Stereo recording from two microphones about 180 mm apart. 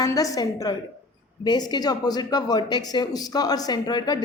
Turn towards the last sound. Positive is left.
turn(degrees=20)  # may be behind; listen again after turning